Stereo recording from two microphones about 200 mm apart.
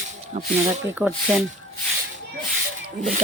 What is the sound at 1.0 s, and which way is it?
Speech, 10° right (ahead or behind).